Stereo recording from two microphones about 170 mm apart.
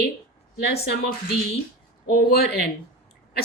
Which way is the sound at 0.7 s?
70° left (ahead or behind).